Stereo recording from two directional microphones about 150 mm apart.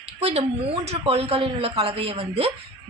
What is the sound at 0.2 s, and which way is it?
Speech, 45° right (ahead or behind).